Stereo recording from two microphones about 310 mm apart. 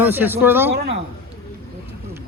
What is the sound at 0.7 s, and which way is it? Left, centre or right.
Speech, right.